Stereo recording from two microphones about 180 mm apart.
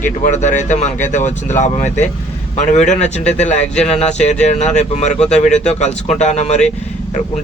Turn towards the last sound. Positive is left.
turn(degrees=40)  # may be behind; listen again after turning